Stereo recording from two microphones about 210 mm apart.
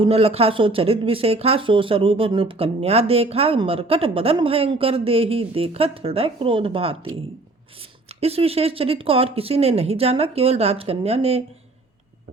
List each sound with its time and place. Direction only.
0.0 s speech: 30° right (ahead or behind)
8.2 s speech: 30° right (ahead or behind)